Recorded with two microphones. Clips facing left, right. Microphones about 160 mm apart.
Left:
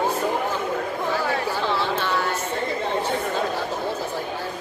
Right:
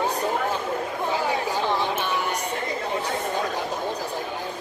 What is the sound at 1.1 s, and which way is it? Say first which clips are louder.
Chatter: even; 15° right (ahead or behind).